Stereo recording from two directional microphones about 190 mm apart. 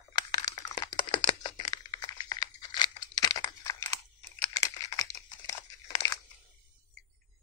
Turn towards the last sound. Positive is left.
turn(degrees=15)  # may be behind; listen again after turning